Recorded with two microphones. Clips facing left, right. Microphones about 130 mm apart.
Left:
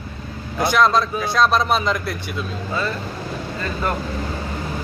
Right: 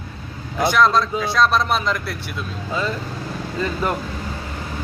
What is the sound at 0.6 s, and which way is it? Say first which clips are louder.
Speech: even; centre (ahead or behind).